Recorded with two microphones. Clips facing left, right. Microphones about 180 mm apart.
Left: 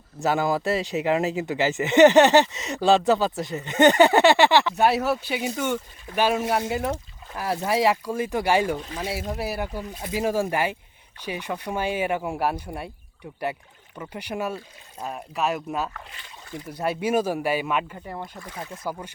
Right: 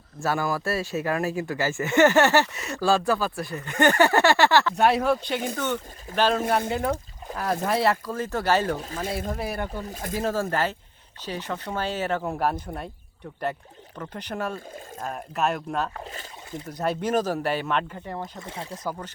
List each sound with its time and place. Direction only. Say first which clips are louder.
0.2 s speech: left 3 dB; 20° left (ahead or behind)
4.8 s speech: even; 5° left (ahead or behind)
9.9 s speech: even; 45° right (ahead or behind)
10.2 s speech: left 2 dB; 10° left (ahead or behind)
14.0 s speech: left 1 dB; 10° left (ahead or behind)
18.2 s speech: right 1 dB; 25° right (ahead or behind)
18.8 s speech: left 1 dB; 10° left (ahead or behind)